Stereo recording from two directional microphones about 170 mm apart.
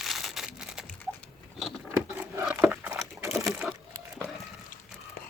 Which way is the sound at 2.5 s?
10° right (ahead or behind).